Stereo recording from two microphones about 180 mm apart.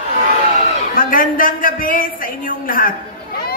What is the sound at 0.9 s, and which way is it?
A man's voice, 50° left (ahead or behind).